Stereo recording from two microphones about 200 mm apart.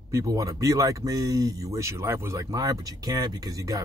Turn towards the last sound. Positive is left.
turn(degrees=-15)  # may be behind; listen again after turning